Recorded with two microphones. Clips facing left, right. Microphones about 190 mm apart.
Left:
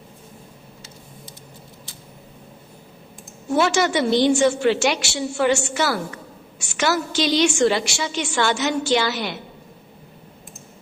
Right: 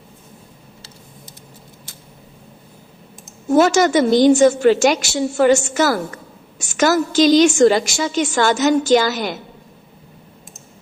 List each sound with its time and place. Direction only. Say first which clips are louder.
3.5 s a woman's voice: right 6 dB; 45° right (ahead or behind)